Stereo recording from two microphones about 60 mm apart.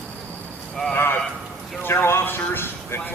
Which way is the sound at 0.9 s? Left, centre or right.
Left.